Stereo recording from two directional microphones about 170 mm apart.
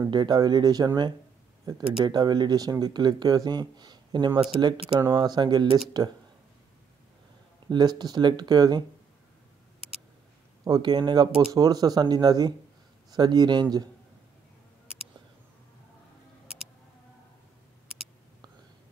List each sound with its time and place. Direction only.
0.0 s speech: 25° right (ahead or behind)
7.6 s speech: 25° right (ahead or behind)
10.6 s speech: 25° right (ahead or behind)